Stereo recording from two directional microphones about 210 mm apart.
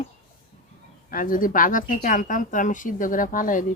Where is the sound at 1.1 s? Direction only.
40° left (ahead or behind).